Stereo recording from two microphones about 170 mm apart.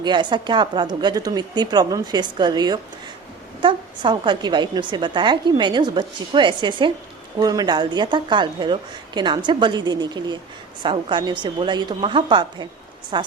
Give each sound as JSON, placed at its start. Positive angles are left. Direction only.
{"t": 0.0, "sound": "a woman's voice", "side_deg": -25}